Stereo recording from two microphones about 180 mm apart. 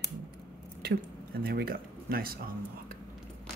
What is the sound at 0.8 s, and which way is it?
Speech, 60° right (ahead or behind).